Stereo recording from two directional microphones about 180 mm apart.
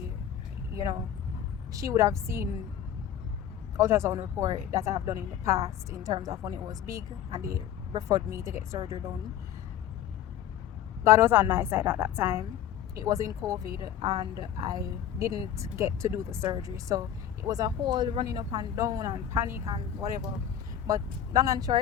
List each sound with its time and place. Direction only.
1.7 s speech: 20° right (ahead or behind)
3.8 s speech: 15° right (ahead or behind)
11.0 s speech: 15° right (ahead or behind)